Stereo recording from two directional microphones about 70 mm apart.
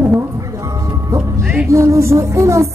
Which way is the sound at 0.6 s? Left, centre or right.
Right.